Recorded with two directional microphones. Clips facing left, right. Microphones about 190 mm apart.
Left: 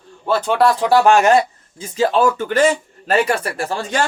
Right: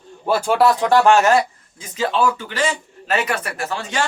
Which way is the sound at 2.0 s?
45° left (ahead or behind).